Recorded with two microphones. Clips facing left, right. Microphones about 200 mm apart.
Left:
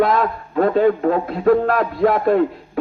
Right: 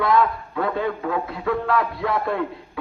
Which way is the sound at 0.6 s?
50° left (ahead or behind).